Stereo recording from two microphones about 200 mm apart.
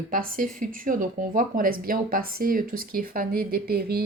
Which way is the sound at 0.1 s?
45° right (ahead or behind).